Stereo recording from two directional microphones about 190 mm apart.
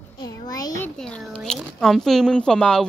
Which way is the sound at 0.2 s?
20° left (ahead or behind).